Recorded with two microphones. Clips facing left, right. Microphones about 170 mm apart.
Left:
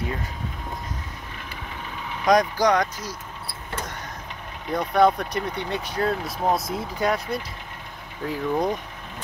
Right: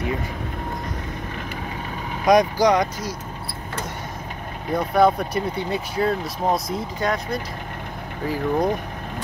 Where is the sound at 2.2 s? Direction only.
10° right (ahead or behind).